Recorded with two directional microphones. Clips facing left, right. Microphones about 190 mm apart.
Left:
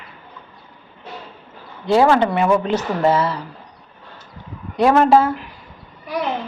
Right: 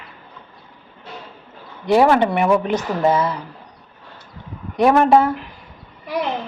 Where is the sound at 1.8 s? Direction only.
20° right (ahead or behind).